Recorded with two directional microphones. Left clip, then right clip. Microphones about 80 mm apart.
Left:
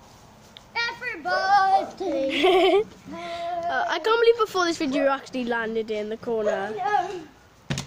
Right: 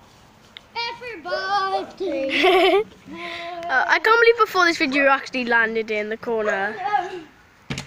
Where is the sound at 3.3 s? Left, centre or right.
Centre.